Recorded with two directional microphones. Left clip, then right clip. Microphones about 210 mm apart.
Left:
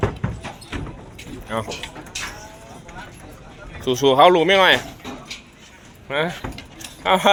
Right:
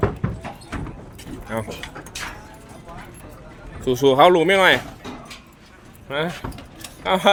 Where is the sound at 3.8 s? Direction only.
15° right (ahead or behind).